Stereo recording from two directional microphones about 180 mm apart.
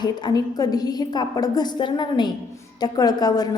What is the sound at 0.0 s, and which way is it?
A woman's voice, 20° left (ahead or behind).